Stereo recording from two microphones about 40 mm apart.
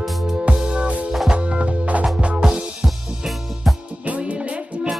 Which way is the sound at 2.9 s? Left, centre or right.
Centre.